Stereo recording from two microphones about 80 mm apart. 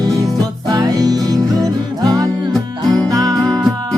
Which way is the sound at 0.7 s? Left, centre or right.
Right.